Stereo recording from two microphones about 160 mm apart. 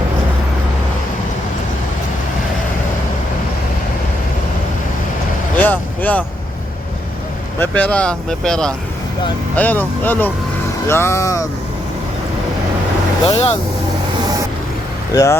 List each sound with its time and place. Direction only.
5.5 s vehicle: 10° left (ahead or behind)
7.6 s speech: 10° left (ahead or behind)
13.3 s speech: 40° left (ahead or behind)
15.1 s speech: 20° left (ahead or behind)